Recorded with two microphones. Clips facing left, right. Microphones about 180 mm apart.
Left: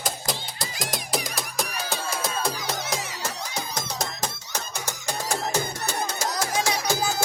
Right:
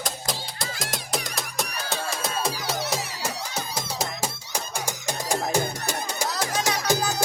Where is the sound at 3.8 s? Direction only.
10° right (ahead or behind).